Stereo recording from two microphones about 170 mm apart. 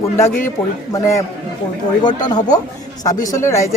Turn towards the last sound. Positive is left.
turn(degrees=20)  # may be behind; listen again after turning